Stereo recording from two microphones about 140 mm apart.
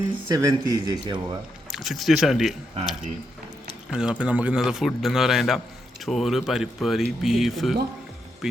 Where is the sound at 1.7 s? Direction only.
Centre (ahead or behind).